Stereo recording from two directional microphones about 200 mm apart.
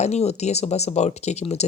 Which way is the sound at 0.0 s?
35° left (ahead or behind).